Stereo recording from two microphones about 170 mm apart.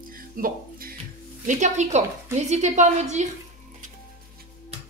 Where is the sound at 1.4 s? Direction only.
45° right (ahead or behind).